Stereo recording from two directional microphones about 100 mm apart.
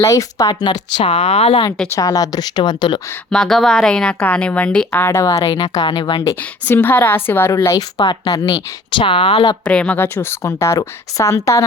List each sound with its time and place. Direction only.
0.0 s speech: 35° left (ahead or behind)
0.7 s speech: 55° left (ahead or behind); by 1.6 s 85° left
1.9 s speech: 40° left (ahead or behind)
3.2 s speech: 5° left (ahead or behind)
5.1 s speech: 30° left (ahead or behind)
5.4 s speech: 65° left (ahead or behind)
5.6 s speech: 45° left (ahead or behind)
6.7 s a woman's voice: 20° left (ahead or behind); by 8.5 s 40° left (ahead or behind)
8.9 s speech: 55° left (ahead or behind)
9.6 s speech: 10° left (ahead or behind)
10.0 s a woman's voice: 20° left (ahead or behind)